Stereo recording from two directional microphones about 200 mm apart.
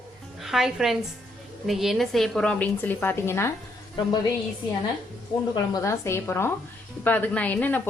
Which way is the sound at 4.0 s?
25° left (ahead or behind).